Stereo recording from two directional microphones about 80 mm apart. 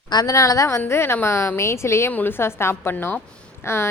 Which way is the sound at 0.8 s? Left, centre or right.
Left.